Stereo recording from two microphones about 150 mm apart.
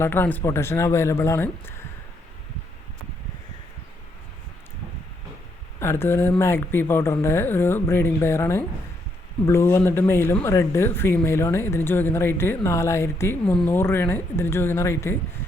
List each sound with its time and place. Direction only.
0.0 s speech: 15° left (ahead or behind)
5.8 s speech: 15° left (ahead or behind)